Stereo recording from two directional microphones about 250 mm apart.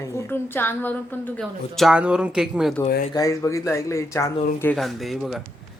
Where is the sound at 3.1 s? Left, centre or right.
Centre.